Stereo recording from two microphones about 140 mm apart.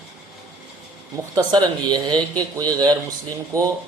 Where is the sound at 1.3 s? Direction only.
30° right (ahead or behind).